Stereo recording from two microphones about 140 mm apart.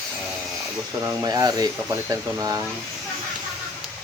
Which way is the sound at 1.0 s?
25° right (ahead or behind).